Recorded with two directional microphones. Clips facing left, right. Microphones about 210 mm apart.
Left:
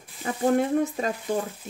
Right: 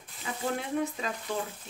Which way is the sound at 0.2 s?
50° left (ahead or behind).